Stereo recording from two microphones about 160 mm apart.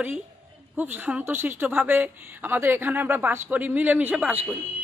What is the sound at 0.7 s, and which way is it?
A woman's voice, 10° right (ahead or behind).